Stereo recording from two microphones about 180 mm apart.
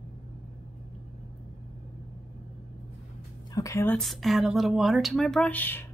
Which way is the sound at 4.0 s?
Centre (ahead or behind).